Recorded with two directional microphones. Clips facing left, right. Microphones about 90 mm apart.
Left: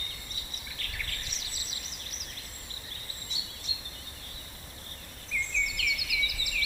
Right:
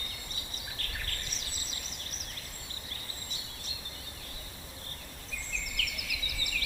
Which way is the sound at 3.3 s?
45° right (ahead or behind).